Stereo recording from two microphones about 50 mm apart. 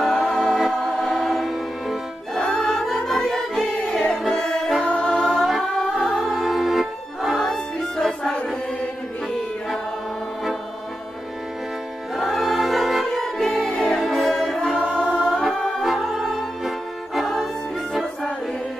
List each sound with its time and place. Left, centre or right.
0.0 s music: centre
2.6 s music: centre
5.8 s music: centre
7.4 s music: centre
12.2 s choir: centre
13.1 s music: centre
15.8 s music: centre